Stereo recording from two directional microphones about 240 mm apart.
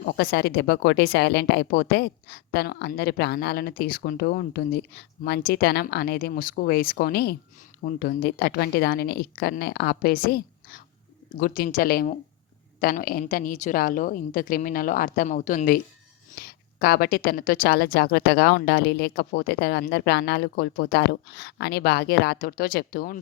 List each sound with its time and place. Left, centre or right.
0.0 s speech: left